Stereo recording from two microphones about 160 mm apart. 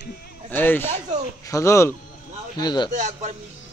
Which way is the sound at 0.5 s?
15° left (ahead or behind).